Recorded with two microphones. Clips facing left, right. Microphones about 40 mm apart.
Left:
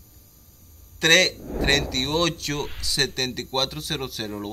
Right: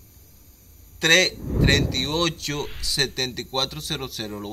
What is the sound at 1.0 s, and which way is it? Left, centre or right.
Speech, centre.